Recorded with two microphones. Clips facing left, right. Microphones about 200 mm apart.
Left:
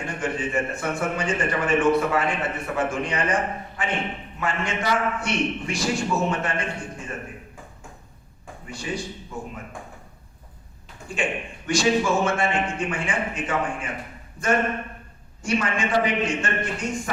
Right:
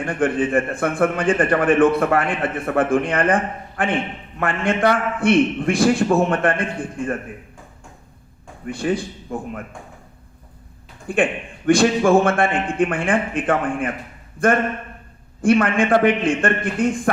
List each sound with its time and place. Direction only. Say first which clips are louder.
0.0 s a man's voice: right 8 dB; 55° right (ahead or behind)
8.6 s speech: right 9 dB; 55° right (ahead or behind)
11.1 s a man's voice: right 7 dB; 55° right (ahead or behind)
15.4 s a man's voice: right 9 dB; 55° right (ahead or behind)